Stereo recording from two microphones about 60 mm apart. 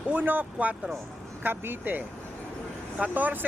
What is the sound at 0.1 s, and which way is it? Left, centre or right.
Speech, right.